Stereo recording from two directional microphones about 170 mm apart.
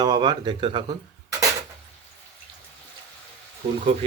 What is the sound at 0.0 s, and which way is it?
Speech, 25° right (ahead or behind).